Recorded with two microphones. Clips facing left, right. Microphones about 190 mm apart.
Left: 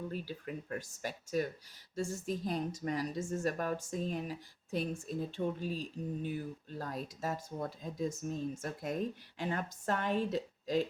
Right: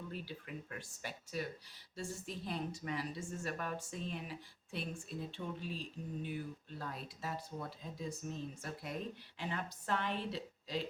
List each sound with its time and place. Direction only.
0.1 s a woman's voice: 40° left (ahead or behind)